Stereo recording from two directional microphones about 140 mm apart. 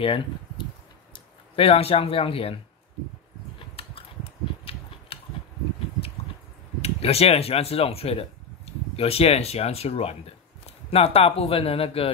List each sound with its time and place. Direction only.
0.0 s speech: 40° left (ahead or behind)
3.5 s a sound: 40° left (ahead or behind)
6.8 s speech: 45° left (ahead or behind)